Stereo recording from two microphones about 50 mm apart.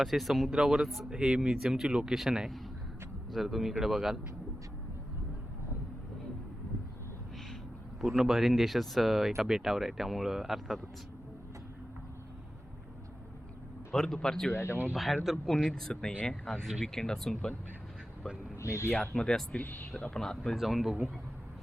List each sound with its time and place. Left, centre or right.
0.0 s speech: centre
0.5 s speech: centre
8.0 s speech: centre
13.9 s speech: centre
14.5 s speech: left
14.9 s speech: centre
18.5 s a sound: left
19.1 s speech: centre
19.6 s speech: left
20.2 s speech: centre
20.6 s speech: centre